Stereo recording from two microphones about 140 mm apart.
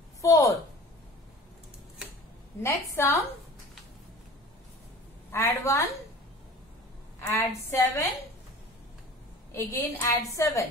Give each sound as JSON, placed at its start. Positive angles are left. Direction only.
{"t": 0.2, "sound": "a sound", "side_deg": 25}
{"t": 2.6, "sound": "a woman's voice", "side_deg": 20}
{"t": 5.3, "sound": "a woman's voice", "side_deg": 20}
{"t": 7.2, "sound": "a woman's voice", "side_deg": 15}
{"t": 9.5, "sound": "a woman's voice", "side_deg": 20}